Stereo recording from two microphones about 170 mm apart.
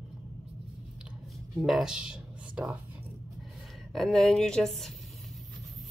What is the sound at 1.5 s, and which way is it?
Speech, centre (ahead or behind).